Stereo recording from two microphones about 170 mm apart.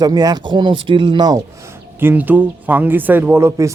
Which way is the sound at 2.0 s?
10° right (ahead or behind).